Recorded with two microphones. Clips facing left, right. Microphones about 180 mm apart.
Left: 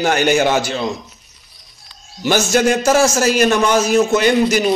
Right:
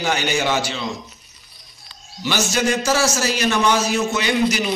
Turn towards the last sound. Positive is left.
turn(degrees=45)  # may be behind; listen again after turning